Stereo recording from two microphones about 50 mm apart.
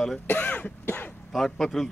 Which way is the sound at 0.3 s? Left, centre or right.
Left.